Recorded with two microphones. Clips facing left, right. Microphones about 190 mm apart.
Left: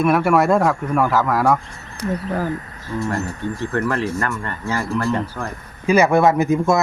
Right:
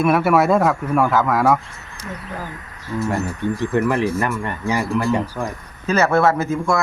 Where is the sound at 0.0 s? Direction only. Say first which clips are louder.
Even; 5° right (ahead or behind).